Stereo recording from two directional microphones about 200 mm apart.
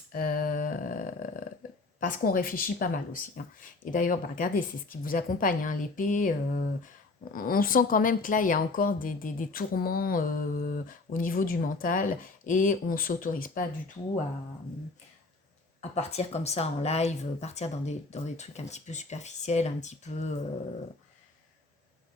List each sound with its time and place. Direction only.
0.1 s a sound: 45° left (ahead or behind)
2.0 s speech: 45° left (ahead or behind)
15.8 s speech: 30° left (ahead or behind)